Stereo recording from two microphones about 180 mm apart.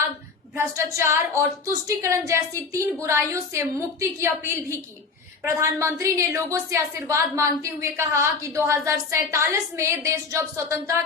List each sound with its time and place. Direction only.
0.5 s a woman's voice: 15° right (ahead or behind)